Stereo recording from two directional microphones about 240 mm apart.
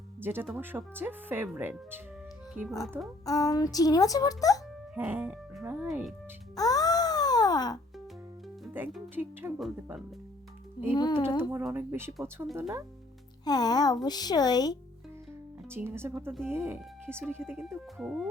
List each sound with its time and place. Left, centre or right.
0.2 s speech: centre
3.2 s speech: centre
4.9 s speech: centre
6.6 s wail: centre
8.6 s speech: centre
10.9 s speech: centre
11.3 s speech: centre
13.4 s speech: centre
15.7 s speech: centre